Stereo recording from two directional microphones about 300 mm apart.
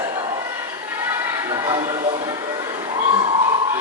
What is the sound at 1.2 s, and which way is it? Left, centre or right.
Music, centre.